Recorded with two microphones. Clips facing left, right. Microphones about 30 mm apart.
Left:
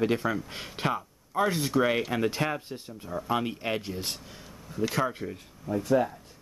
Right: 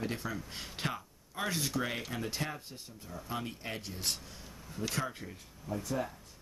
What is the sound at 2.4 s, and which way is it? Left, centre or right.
Speech, left.